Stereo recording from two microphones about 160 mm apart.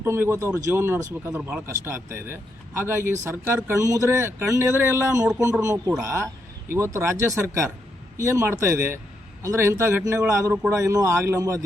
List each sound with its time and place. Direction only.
0.0 s speech: 15° right (ahead or behind)